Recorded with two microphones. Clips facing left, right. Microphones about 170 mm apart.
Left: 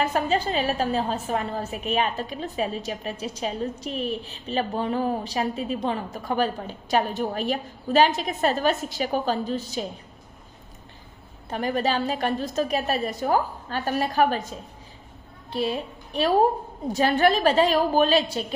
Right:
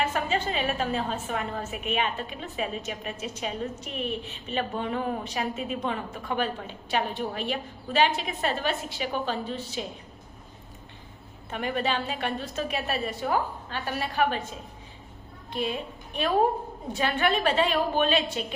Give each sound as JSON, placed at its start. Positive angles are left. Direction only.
{"t": 0.0, "sound": "a woman's voice", "side_deg": 35}
{"t": 11.4, "sound": "a woman's voice", "side_deg": 35}
{"t": 15.5, "sound": "a woman's voice", "side_deg": 35}